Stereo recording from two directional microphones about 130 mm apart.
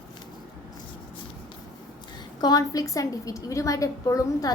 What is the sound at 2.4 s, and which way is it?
A woman's voice, 30° left (ahead or behind).